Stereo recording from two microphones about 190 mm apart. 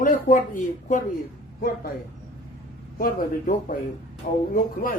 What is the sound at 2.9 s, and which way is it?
A man's voice, 50° left (ahead or behind).